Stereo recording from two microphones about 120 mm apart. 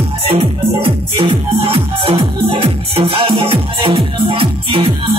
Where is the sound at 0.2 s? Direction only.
50° right (ahead or behind).